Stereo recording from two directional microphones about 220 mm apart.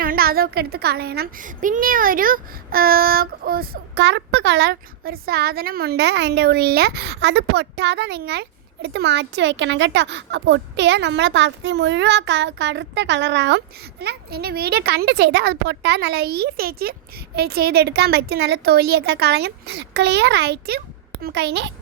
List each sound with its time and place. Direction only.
0.0 s a child's voice: 40° right (ahead or behind)